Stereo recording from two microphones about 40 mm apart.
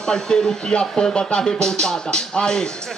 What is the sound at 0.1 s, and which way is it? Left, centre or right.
Speech, centre.